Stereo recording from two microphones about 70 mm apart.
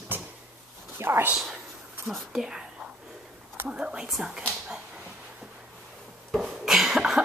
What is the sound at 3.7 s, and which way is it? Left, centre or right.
Speech, centre.